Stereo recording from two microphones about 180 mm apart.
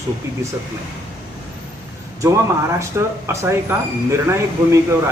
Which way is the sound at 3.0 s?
15° right (ahead or behind).